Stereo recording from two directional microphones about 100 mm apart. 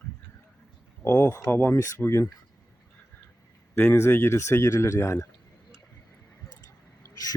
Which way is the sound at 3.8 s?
25° left (ahead or behind).